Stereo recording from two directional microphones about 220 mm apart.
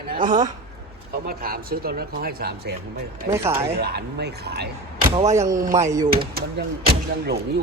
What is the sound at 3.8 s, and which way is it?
Speech, 45° right (ahead or behind).